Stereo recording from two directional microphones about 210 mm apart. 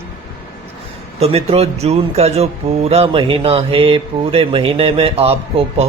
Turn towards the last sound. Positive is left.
turn(degrees=-30)  # may be behind; listen again after turning